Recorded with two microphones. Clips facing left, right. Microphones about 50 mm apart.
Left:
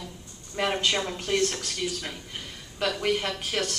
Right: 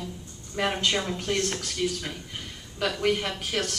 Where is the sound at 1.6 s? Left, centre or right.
Centre.